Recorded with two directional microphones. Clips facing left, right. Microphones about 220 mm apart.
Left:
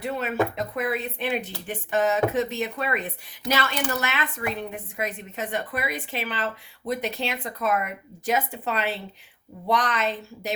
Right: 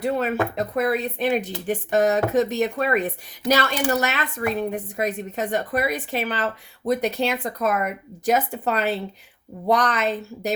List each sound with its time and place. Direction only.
0.0 s a woman's voice: 40° right (ahead or behind)